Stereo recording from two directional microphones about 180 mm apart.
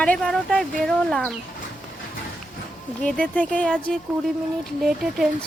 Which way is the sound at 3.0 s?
5° left (ahead or behind).